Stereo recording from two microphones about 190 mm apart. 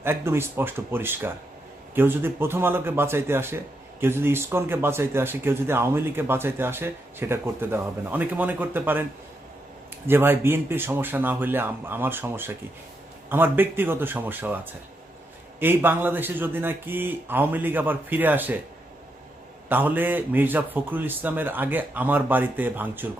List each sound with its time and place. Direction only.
0.0 s speech: 10° right (ahead or behind)
10.1 s speech: 10° right (ahead or behind)
19.6 s speech: 10° right (ahead or behind)